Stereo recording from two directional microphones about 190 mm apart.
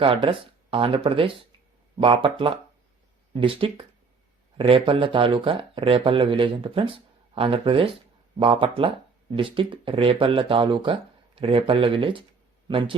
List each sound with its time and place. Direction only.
0.0 s a man's voice: 30° right (ahead or behind)